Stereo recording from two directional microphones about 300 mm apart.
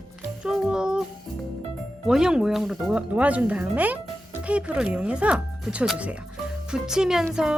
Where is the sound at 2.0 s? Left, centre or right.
Centre.